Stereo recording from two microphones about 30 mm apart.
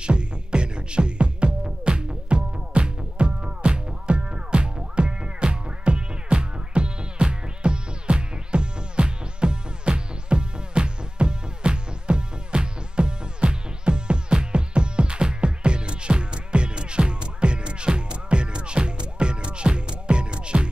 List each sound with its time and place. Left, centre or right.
0.0 s music: right